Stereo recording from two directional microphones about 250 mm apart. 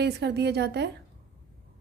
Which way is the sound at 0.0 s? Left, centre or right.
Right.